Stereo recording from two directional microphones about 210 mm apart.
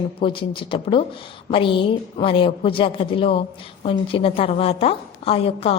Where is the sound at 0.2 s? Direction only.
25° left (ahead or behind).